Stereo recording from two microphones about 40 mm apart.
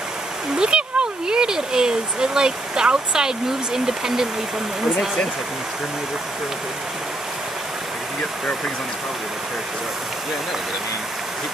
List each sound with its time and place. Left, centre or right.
0.6 s speech: right